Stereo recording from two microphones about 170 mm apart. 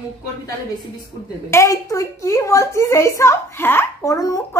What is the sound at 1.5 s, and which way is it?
Speech, 20° left (ahead or behind).